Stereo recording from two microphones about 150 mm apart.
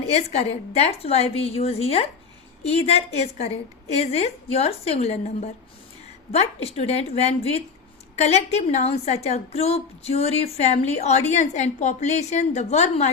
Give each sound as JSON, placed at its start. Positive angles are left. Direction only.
{"t": 0.1, "sound": "a woman's voice", "side_deg": 45}